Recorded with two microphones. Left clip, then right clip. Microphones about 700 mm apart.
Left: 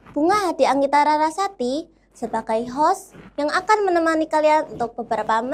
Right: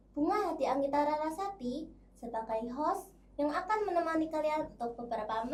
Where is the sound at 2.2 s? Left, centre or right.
Left.